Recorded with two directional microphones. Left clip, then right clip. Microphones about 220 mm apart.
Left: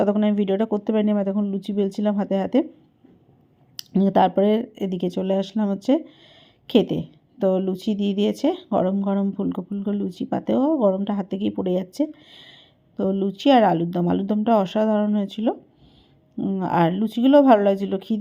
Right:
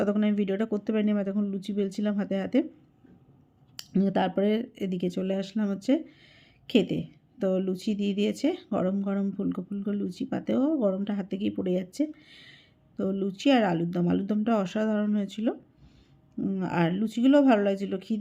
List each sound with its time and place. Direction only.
0.0 s a woman's voice: 5° left (ahead or behind)
3.8 s a woman's voice: 10° left (ahead or behind)